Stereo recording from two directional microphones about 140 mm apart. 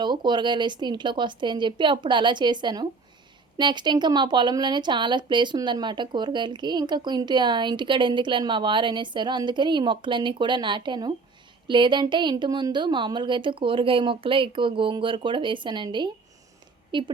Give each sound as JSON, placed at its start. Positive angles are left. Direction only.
{"t": 0.0, "sound": "a woman's voice", "side_deg": -30}